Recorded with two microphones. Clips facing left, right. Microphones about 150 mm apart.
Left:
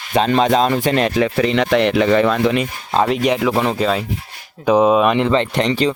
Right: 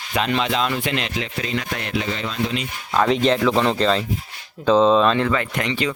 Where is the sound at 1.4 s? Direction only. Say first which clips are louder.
Left 13 dB; 80° left; by 2.7 s 60° left (ahead or behind).